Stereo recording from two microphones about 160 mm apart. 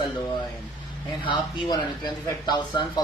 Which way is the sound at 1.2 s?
30° left (ahead or behind).